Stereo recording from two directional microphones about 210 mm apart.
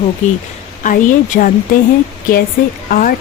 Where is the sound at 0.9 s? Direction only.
40° left (ahead or behind).